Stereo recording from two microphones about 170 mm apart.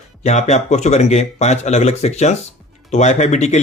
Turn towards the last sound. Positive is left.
turn(degrees=40)  # may be behind; listen again after turning